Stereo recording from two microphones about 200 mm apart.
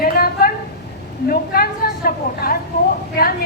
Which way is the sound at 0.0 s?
50° left (ahead or behind).